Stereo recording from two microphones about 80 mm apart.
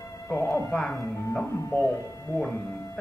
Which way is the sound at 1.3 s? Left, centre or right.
Left.